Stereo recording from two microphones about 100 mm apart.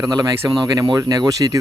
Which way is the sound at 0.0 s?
40° right (ahead or behind).